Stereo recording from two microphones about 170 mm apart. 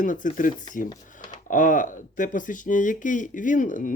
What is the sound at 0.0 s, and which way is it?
Speech, 50° left (ahead or behind).